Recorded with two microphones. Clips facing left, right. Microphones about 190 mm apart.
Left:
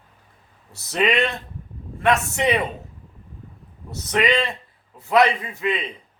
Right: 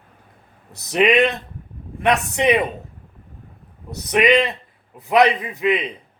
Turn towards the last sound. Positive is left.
turn(degrees=-20)  # may be behind; listen again after turning